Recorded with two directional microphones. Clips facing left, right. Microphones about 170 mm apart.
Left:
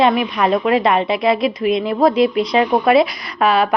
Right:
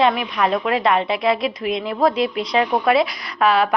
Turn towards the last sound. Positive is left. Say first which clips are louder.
# left 2 dB
turn(degrees=15)  # may be behind; listen again after turning